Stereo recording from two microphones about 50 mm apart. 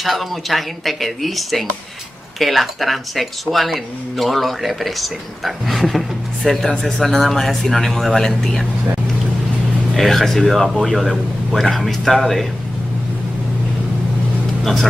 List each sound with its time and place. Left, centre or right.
0.0 s speech: centre
9.9 s speech: centre
14.6 s speech: centre